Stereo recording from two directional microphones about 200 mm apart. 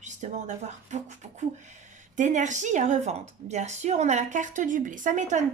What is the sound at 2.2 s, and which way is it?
Speech, 40° right (ahead or behind).